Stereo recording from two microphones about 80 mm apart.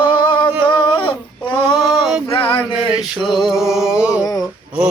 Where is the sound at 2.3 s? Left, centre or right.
Left.